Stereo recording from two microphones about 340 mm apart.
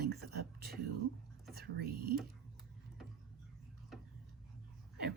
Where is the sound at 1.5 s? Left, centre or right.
Right.